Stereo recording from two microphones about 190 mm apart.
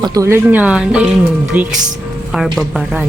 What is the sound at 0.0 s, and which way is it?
A woman's voice, 20° right (ahead or behind).